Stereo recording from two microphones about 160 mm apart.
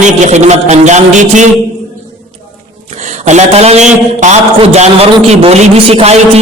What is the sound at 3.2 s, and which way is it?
A man's voice, 45° right (ahead or behind).